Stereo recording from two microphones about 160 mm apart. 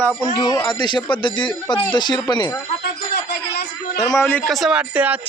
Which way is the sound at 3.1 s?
80° left.